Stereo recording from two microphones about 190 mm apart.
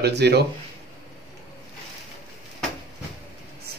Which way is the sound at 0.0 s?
60° right (ahead or behind).